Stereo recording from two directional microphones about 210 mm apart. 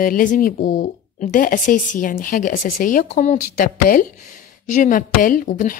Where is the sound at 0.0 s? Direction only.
40° left (ahead or behind).